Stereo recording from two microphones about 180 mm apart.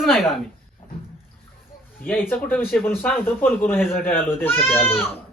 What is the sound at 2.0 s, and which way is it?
Speech, 10° left (ahead or behind).